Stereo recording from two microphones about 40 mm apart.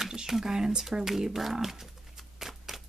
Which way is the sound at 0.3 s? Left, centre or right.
Centre.